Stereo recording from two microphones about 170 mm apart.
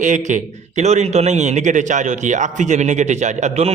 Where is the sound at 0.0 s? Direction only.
45° right (ahead or behind).